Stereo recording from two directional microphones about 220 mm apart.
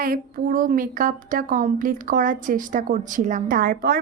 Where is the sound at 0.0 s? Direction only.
40° right (ahead or behind).